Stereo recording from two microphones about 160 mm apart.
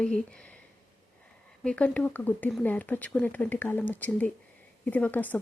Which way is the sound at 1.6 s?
10° left (ahead or behind).